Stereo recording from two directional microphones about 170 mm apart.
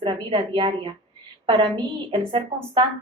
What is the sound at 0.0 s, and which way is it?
A woman's voice, 30° right (ahead or behind).